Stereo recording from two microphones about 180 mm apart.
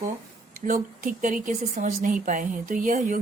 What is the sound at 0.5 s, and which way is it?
Speech, 50° right (ahead or behind).